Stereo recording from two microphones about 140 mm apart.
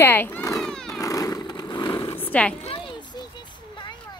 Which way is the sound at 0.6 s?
5° left (ahead or behind).